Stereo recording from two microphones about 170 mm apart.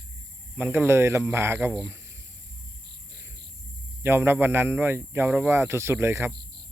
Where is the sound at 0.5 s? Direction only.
10° right (ahead or behind).